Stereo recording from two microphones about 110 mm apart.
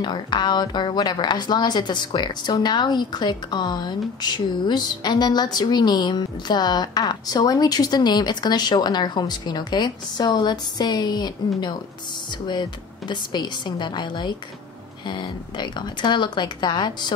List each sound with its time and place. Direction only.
0.0 s speech: 40° left (ahead or behind)